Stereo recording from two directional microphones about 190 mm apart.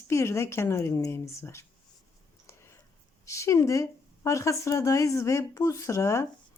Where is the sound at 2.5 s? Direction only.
15° left (ahead or behind).